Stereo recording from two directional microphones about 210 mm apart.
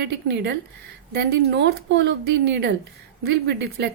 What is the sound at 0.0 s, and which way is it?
A woman's voice, 55° right (ahead or behind).